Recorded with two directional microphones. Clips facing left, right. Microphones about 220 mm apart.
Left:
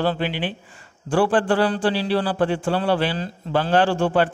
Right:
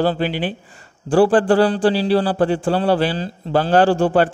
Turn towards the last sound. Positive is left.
turn(degrees=-40)  # may be behind; listen again after turning